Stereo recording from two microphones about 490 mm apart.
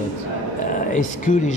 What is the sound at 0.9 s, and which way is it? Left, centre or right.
Speech, centre.